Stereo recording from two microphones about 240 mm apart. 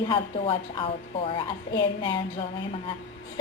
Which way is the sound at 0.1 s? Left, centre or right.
Left.